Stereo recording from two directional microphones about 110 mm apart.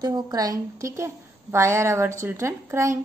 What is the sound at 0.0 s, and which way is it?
A woman's voice, 35° right (ahead or behind).